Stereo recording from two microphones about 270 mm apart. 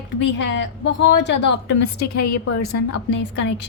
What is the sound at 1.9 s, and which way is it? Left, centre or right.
Speech, left.